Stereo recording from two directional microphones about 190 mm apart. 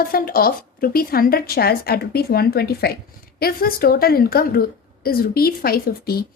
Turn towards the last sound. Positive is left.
turn(degrees=55)  # may be behind; listen again after turning